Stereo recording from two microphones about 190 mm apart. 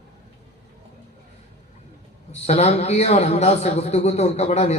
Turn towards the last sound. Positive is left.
turn(degrees=35)  # may be behind; listen again after turning